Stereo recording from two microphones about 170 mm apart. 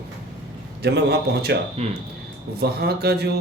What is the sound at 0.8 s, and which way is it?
Speech, 75° right (ahead or behind).